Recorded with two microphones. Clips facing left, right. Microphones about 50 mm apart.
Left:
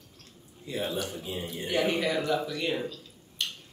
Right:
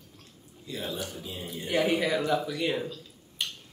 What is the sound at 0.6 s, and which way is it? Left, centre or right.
Speech, left.